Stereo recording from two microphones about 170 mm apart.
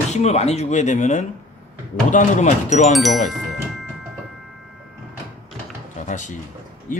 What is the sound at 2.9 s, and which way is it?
Speech, centre (ahead or behind).